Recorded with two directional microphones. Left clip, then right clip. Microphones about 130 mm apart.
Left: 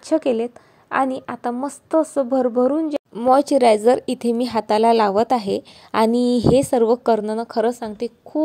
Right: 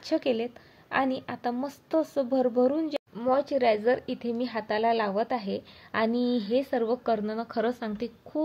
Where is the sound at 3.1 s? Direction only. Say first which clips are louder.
Left 11 dB; 70° left (ahead or behind).